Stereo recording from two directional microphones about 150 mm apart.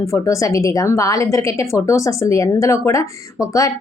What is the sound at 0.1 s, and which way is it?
A woman's voice, 20° left (ahead or behind).